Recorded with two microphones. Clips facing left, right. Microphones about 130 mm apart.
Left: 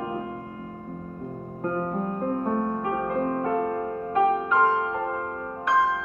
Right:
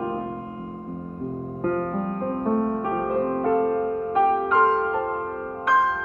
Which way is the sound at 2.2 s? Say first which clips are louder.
Right 3 dB; 40° right (ahead or behind).